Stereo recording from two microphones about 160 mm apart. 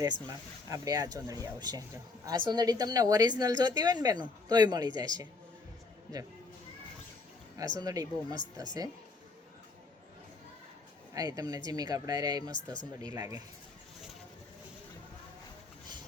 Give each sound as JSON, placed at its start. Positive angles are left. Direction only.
{"t": 0.7, "sound": "a woman's voice", "side_deg": -25}
{"t": 7.5, "sound": "a woman's voice", "side_deg": -25}
{"t": 11.1, "sound": "a woman's voice", "side_deg": -25}